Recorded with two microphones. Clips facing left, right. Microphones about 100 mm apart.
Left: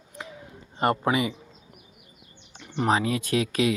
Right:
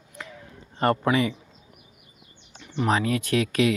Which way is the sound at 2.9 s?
25° left (ahead or behind).